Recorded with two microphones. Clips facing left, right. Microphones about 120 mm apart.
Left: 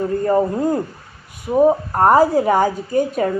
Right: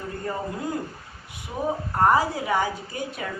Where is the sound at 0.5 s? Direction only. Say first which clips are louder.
Left 10 dB; 45° left (ahead or behind).